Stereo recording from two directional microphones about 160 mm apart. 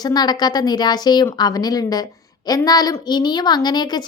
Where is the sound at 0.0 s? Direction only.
25° left (ahead or behind).